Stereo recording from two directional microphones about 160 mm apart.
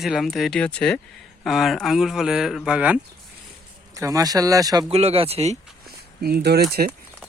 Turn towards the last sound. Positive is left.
turn(degrees=-85)